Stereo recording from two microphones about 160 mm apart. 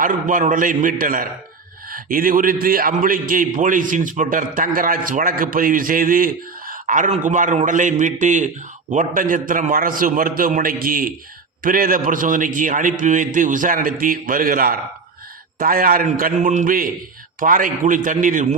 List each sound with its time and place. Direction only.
0.0 s a man's voice: 55° right (ahead or behind)